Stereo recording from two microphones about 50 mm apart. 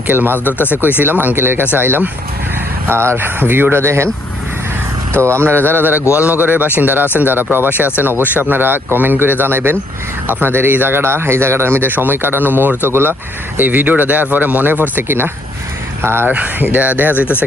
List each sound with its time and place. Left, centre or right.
0.1 s speech: right
0.3 s speech: left
0.8 s speech: right
2.9 s speech: right
3.2 s speech: right
5.2 s speech: right
6.1 s speech: right
13.6 s speech: right
16.2 s speech: right